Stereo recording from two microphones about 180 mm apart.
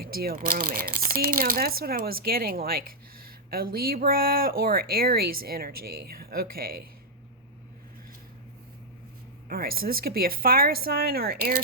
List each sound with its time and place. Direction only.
0.0 s speech: 55° right (ahead or behind)
9.5 s speech: 55° right (ahead or behind)